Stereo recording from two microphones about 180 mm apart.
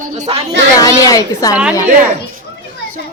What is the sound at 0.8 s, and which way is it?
Speech, 20° left (ahead or behind).